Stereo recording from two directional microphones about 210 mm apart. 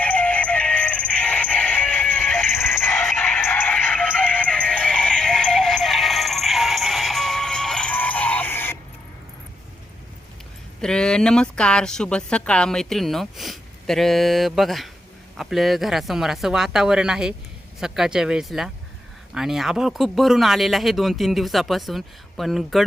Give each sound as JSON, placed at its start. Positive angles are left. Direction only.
{"t": 0.0, "sound": "music", "side_deg": 5}
{"t": 10.8, "sound": "a woman's voice", "side_deg": 5}